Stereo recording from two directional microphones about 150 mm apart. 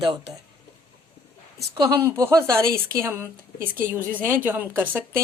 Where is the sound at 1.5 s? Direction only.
20° right (ahead or behind).